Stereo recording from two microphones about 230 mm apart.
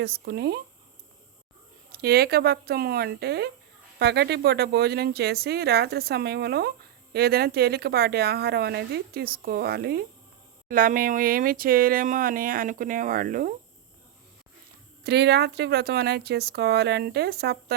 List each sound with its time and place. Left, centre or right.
0.0 s speech: right
1.9 s speech: right
15.0 s speech: right